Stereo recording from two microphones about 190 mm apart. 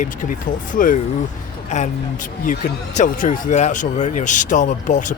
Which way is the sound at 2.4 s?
45° left (ahead or behind).